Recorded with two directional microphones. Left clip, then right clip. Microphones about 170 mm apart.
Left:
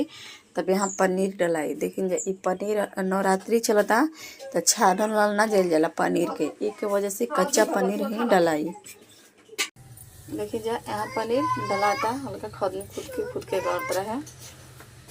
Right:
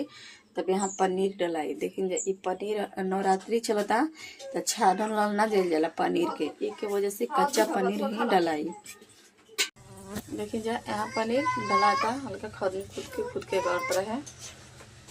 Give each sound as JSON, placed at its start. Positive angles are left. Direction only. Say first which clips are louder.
{"t": 0.2, "sound": "a woman's voice", "louder": "left 4 dB", "side_deg": 20}
{"t": 10.3, "sound": "speech", "louder": "left 4 dB", "side_deg": 10}